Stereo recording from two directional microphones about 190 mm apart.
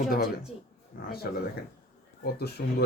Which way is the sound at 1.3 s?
50° left (ahead or behind).